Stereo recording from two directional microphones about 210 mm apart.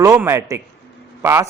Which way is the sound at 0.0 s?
15° right (ahead or behind).